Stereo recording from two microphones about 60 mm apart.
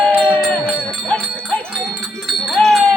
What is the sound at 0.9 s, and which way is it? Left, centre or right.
Jingle bell, centre.